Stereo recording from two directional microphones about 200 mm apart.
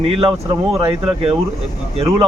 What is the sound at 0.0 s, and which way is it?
Speech, 25° right (ahead or behind).